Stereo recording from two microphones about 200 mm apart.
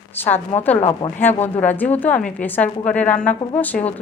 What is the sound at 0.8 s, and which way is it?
Speech, 30° left (ahead or behind).